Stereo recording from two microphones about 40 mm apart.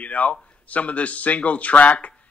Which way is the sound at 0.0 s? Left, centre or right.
Left.